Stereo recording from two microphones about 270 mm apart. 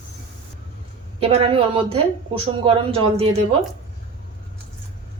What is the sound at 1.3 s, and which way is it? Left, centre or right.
Speech, right.